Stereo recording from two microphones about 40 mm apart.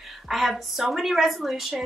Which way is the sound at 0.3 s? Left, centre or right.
Centre.